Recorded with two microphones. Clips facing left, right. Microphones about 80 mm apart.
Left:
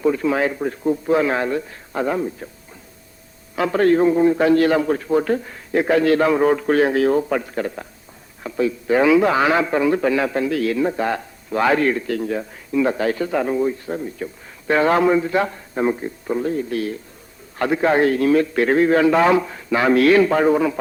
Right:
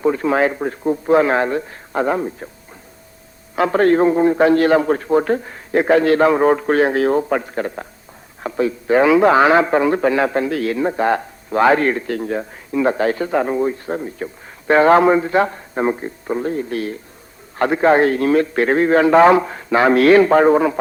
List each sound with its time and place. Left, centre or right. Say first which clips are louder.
0.0 s a man's voice: right 2 dB; right
3.5 s a man's voice: right 2 dB; right